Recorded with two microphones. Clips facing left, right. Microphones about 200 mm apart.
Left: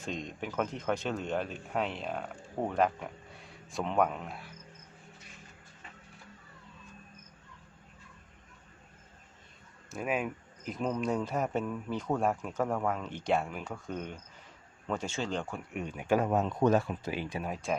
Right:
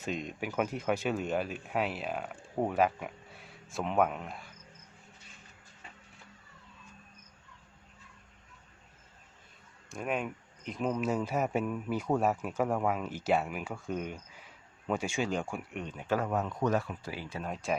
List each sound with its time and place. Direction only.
0.0 s speech: 5° right (ahead or behind)
9.9 s speech: 5° left (ahead or behind)
15.7 s speech: 10° left (ahead or behind)
17.5 s speech: centre (ahead or behind)